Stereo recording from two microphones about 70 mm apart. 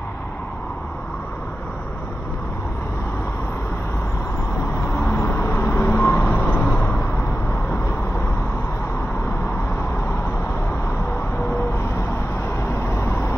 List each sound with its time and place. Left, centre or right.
4.9 s vehicle: left
6.8 s a sound: left
11.5 s vehicle: left